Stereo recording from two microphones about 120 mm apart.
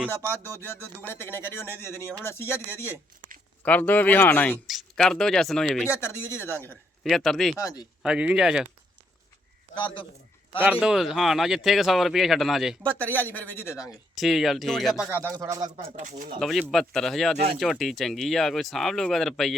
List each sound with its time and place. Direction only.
0.0 s speech: 20° left (ahead or behind)
4.6 s speech: centre (ahead or behind)
6.3 s speech: 20° left (ahead or behind)
7.0 s speech: centre (ahead or behind)
9.7 s speech: 45° left (ahead or behind)
10.6 s speech: 10° right (ahead or behind)
13.0 s speech: 15° left (ahead or behind)
13.7 s speech: 5° right (ahead or behind)
15.1 s speech: 25° right (ahead or behind)
16.0 s speech: 90° right
16.4 s speech: centre (ahead or behind)